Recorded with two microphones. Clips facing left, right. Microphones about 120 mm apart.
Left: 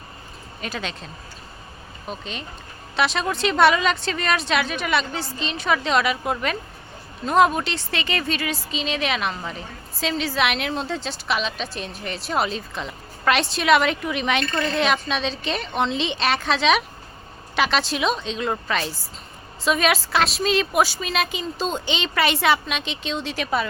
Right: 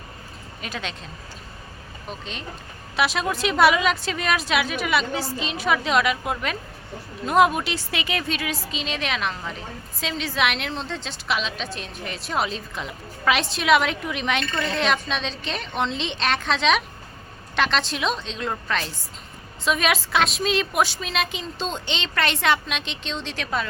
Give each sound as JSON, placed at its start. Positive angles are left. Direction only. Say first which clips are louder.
{"t": 0.6, "sound": "a woman's voice", "louder": "left 2 dB", "side_deg": 0}
{"t": 2.0, "sound": "a woman's voice", "louder": "left 2 dB", "side_deg": 0}